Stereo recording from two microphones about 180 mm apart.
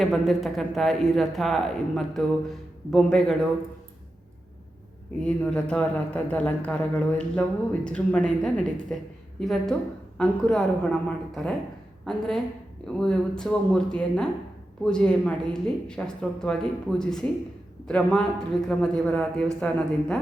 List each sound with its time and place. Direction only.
0.0 s speech: centre (ahead or behind)
5.2 s a man's voice: 5° left (ahead or behind)